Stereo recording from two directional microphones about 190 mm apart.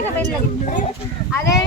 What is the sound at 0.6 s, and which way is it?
Speech, 40° left (ahead or behind).